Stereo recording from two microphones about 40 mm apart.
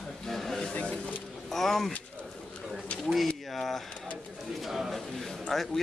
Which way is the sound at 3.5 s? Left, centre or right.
Centre.